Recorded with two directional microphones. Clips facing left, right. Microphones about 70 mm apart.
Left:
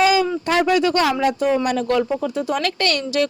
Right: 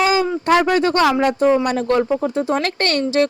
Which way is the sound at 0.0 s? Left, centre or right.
Right.